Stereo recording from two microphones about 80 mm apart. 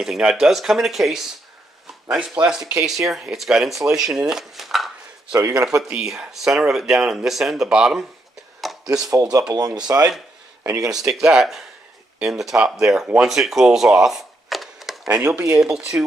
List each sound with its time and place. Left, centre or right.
0.0 s speech: centre
2.4 s speech: centre
5.3 s a man's voice: right
5.8 s speech: centre
9.1 s a man's voice: right
10.6 s speech: right
11.2 s speech: centre
13.3 s a sound: centre
15.2 s speech: centre
15.6 s speech: centre